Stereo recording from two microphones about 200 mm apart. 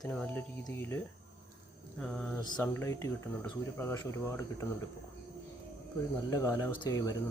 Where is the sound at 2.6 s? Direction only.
10° left (ahead or behind).